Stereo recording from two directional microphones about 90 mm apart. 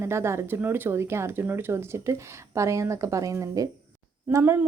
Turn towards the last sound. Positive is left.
turn(degrees=-35)  # may be behind; listen again after turning